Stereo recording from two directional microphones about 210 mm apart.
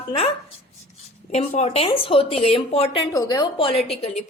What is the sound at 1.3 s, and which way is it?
A woman's voice, 30° left (ahead or behind).